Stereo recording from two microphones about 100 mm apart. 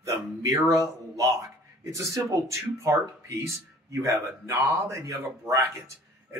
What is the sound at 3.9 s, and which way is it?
Speech, 30° right (ahead or behind).